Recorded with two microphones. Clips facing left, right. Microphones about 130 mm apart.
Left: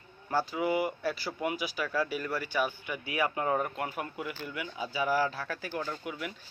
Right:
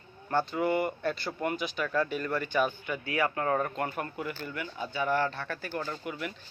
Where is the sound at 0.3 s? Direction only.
5° left (ahead or behind).